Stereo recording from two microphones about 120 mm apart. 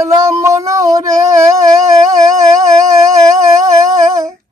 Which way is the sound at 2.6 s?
30° right (ahead or behind).